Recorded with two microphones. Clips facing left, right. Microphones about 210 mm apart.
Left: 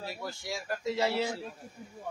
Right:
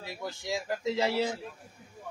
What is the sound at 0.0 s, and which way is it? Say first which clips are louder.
Speech: right 1 dB; 20° right (ahead or behind).